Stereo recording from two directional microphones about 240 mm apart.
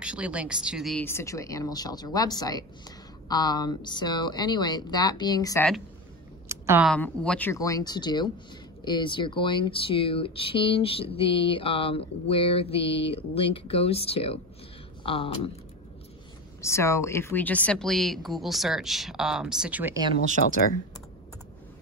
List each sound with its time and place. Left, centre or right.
0.0 s speech: centre
6.5 s a sound: centre
6.9 s speech: centre; by 15.5 s left
16.6 s speech: centre
20.4 s speech: left